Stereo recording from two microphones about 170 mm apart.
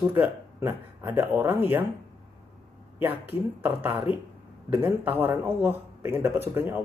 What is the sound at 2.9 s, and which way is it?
Speech, 10° right (ahead or behind).